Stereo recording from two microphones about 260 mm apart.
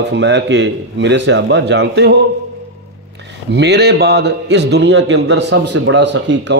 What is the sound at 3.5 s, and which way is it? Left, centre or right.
A man's voice, right.